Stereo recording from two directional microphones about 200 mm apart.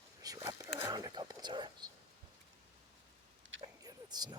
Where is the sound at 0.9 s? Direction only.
20° right (ahead or behind).